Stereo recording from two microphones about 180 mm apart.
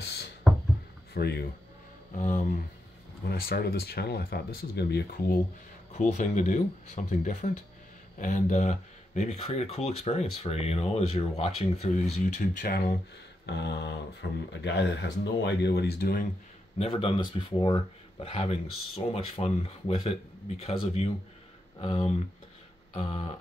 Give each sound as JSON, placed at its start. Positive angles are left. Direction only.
{"t": 0.0, "sound": "a sound", "side_deg": 65}
{"t": 1.1, "sound": "speech", "side_deg": 60}
{"t": 2.1, "sound": "speech", "side_deg": 45}
{"t": 3.3, "sound": "speech", "side_deg": 60}
{"t": 5.9, "sound": "speech", "side_deg": 40}
{"t": 13.5, "sound": "speech", "side_deg": 70}
{"t": 16.7, "sound": "speech", "side_deg": 30}